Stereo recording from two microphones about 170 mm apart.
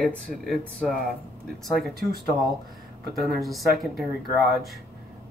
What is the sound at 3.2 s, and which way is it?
Speech, centre (ahead or behind).